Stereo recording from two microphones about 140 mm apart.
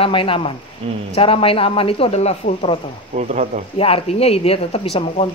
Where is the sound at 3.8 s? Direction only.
45° left (ahead or behind).